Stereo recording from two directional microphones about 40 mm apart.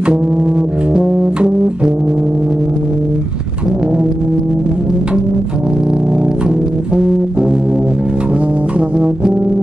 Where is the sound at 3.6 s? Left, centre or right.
Right.